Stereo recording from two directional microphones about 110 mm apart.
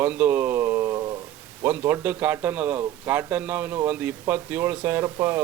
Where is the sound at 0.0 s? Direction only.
15° right (ahead or behind); by 1.1 s 30° right (ahead or behind).